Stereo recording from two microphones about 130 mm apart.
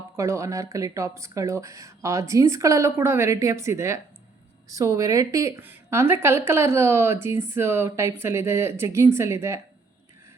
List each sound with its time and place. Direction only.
0.2 s speech: 20° right (ahead or behind)